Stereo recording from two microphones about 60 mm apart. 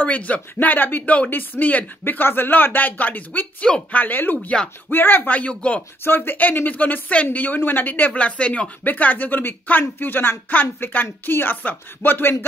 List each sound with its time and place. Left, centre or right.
0.0 s speech: left
6.0 s speech: left; by 8.6 s centre
8.8 s speech: left